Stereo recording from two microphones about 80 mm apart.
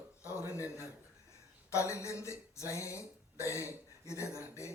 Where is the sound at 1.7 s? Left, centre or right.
Left.